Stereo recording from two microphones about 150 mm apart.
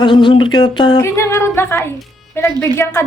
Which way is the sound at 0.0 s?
30° left (ahead or behind).